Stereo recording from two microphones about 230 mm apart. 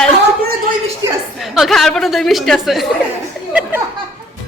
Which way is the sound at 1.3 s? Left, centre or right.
Centre.